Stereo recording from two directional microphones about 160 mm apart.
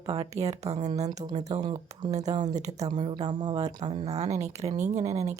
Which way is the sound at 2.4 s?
50° right (ahead or behind).